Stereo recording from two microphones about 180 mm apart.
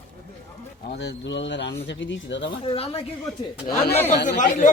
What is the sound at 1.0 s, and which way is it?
Speech, 75° left (ahead or behind).